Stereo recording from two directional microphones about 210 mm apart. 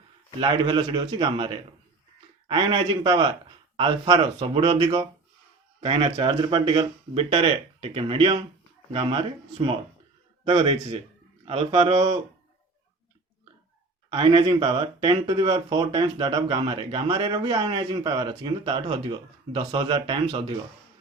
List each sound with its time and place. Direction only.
0.3 s speech: 20° right (ahead or behind)
14.1 s speech: 25° right (ahead or behind)